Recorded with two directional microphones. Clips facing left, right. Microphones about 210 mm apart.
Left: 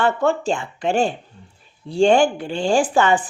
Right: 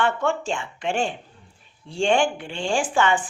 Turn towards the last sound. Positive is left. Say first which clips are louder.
# left 5 dB
turn(degrees=40)  # may be behind; listen again after turning